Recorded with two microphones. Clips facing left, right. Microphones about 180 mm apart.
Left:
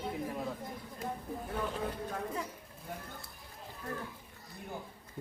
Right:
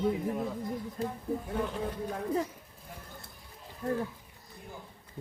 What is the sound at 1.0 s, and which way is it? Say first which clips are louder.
Speech: right 3 dB; 30° right (ahead or behind).